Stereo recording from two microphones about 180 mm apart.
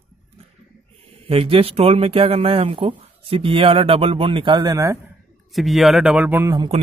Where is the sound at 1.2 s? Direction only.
30° right (ahead or behind).